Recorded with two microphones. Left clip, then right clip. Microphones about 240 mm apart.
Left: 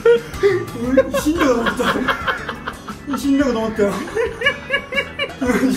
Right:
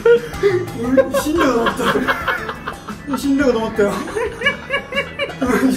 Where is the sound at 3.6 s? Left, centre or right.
Centre.